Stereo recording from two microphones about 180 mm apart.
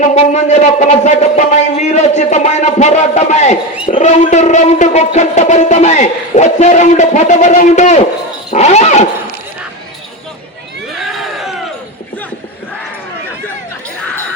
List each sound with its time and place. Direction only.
0.0 s music: 40° left (ahead or behind)
8.4 s roaring cats: 35° left (ahead or behind)
11.2 s crowd: centre (ahead or behind)